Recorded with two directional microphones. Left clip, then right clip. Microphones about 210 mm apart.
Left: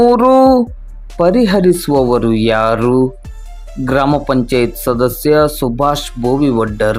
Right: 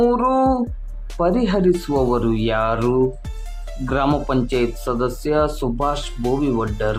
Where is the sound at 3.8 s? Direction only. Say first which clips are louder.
Left 7 dB; 25° left (ahead or behind).